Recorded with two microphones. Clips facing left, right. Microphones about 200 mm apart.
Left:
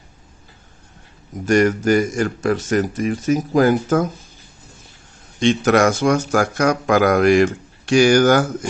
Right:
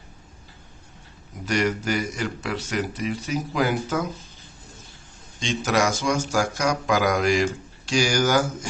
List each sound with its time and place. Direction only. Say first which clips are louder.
1.5 s speech: left 9 dB; 50° left (ahead or behind)
5.4 s speech: left 8 dB; 60° left (ahead or behind)